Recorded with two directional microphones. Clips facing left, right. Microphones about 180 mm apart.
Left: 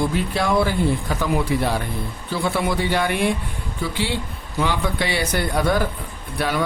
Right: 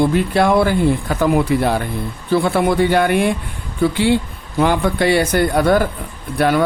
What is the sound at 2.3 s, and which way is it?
A man's voice, 55° right (ahead or behind).